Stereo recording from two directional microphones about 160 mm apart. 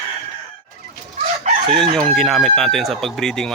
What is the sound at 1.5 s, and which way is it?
Chicken, 45° right (ahead or behind).